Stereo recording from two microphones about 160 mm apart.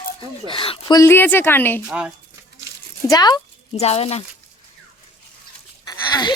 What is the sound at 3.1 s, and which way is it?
Speech, 25° left (ahead or behind).